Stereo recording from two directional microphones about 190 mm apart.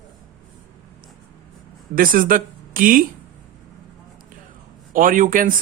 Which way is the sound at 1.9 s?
50° right (ahead or behind).